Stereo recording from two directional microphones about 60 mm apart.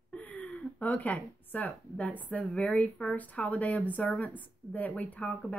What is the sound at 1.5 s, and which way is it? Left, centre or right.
A woman's voice, left.